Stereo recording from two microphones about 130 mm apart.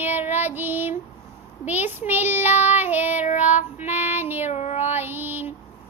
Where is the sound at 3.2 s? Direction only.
65° left (ahead or behind).